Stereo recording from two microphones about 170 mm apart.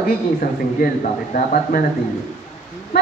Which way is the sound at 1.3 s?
55° left (ahead or behind).